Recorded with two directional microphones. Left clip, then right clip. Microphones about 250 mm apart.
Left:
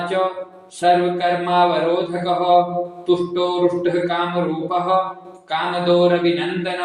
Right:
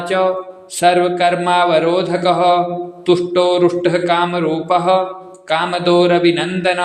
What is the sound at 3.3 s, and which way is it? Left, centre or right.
Mantra, right.